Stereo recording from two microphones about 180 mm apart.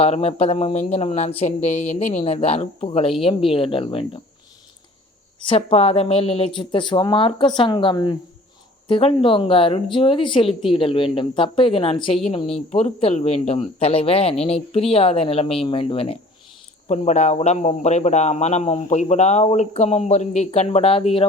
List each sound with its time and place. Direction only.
0.0 s a man's voice: 35° left (ahead or behind)
5.4 s a man's voice: 30° left (ahead or behind)